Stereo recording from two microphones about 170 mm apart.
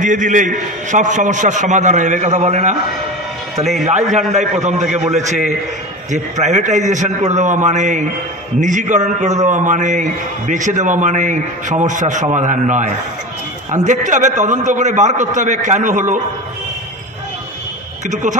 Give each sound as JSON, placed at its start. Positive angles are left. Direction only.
{"t": 0.0, "sound": "a man's voice", "side_deg": -45}
{"t": 3.8, "sound": "a man's voice", "side_deg": -45}
{"t": 18.0, "sound": "a man's voice", "side_deg": -45}